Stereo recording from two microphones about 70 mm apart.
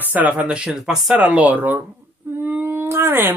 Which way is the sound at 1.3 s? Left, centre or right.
Right.